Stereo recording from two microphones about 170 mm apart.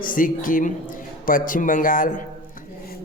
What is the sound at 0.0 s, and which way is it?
A man's voice, 55° left (ahead or behind).